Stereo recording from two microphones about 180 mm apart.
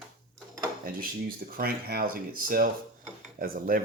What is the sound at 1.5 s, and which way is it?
Cutlery, 55° right (ahead or behind).